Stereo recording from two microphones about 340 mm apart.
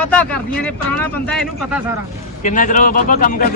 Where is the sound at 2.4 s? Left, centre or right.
Left.